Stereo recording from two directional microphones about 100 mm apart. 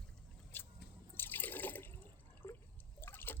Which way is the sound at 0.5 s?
25° left (ahead or behind).